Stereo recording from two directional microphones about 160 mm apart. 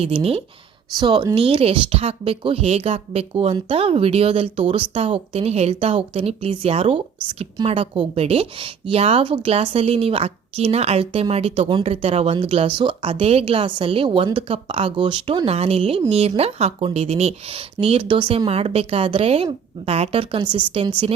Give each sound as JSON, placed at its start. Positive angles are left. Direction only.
{"t": 0.0, "sound": "a woman's voice", "side_deg": -35}